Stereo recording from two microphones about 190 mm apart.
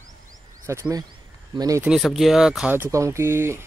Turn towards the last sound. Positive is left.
turn(degrees=-15)  # may be behind; listen again after turning